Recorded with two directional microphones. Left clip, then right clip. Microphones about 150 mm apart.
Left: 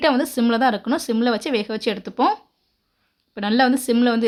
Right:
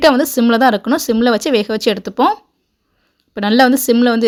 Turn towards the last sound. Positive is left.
turn(degrees=-30)  # may be behind; listen again after turning